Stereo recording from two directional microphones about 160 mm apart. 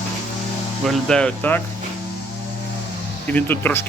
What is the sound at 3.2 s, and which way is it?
Speech, 10° left (ahead or behind).